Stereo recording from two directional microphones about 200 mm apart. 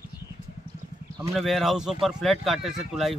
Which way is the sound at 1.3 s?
Centre (ahead or behind).